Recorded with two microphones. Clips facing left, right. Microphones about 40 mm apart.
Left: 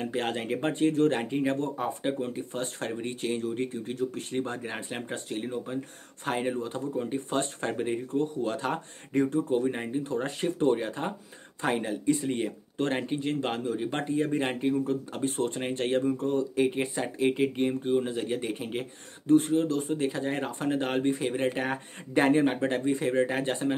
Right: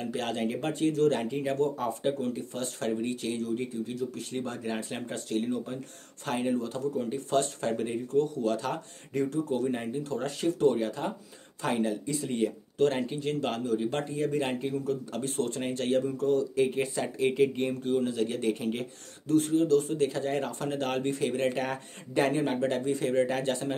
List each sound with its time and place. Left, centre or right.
0.0 s speech: left
4.4 s speech: left
19.2 s speech: left